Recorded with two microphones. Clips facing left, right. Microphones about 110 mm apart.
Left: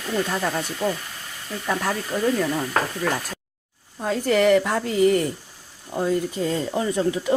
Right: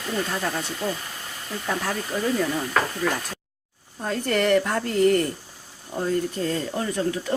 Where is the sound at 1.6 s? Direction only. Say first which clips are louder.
Left 3 dB; 10° left (ahead or behind).